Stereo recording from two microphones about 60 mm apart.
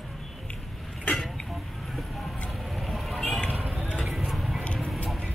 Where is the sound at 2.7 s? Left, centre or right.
Centre.